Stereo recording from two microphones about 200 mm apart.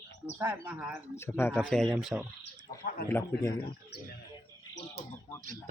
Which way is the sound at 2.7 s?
45° left (ahead or behind).